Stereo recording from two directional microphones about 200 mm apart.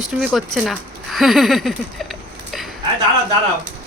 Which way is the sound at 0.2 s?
Centre (ahead or behind).